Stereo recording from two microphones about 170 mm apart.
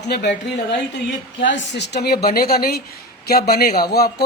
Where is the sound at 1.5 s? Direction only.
90° left.